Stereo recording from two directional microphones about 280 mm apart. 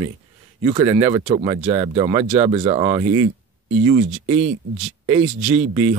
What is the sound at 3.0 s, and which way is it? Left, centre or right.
Speech, right.